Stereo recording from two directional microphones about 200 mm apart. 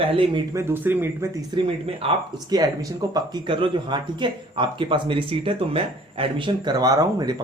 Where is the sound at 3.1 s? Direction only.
20° right (ahead or behind).